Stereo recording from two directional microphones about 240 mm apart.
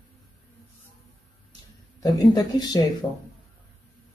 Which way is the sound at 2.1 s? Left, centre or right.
Centre.